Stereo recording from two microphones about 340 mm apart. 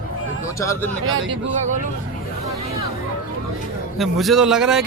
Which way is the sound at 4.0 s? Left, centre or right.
Centre.